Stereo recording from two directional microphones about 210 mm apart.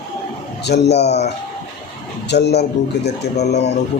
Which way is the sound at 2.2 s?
55° left (ahead or behind).